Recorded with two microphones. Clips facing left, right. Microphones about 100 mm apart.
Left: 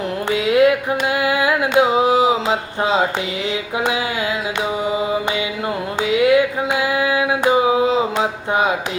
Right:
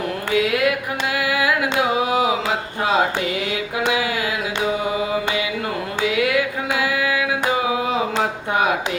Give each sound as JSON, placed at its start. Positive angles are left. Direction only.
{"t": 0.3, "sound": "mantra", "side_deg": 30}
{"t": 1.1, "sound": "singing", "side_deg": 25}
{"t": 6.0, "sound": "a sound", "side_deg": 25}